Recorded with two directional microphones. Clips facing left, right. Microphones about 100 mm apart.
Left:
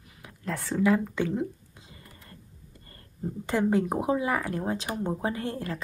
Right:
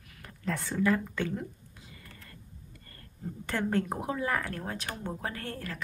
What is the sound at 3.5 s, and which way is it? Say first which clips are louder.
Speech: left 5 dB; 15° left (ahead or behind).